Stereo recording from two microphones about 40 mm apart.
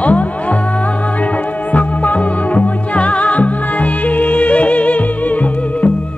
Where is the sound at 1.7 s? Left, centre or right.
Left.